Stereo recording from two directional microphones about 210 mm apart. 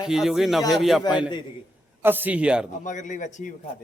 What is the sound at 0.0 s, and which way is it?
A man's voice, centre (ahead or behind).